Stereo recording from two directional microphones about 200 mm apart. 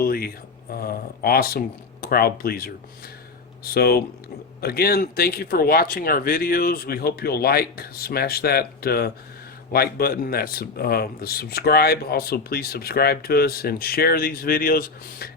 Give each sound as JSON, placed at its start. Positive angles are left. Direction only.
{"t": 0.0, "sound": "speech", "side_deg": 50}